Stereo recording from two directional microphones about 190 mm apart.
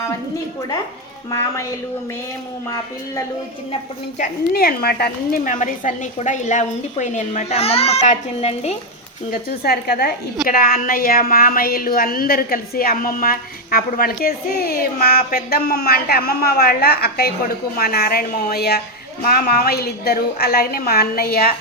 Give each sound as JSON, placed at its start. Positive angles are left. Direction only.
{"t": 4.2, "sound": "a woman's voice", "side_deg": 50}
{"t": 9.3, "sound": "a woman's voice", "side_deg": 50}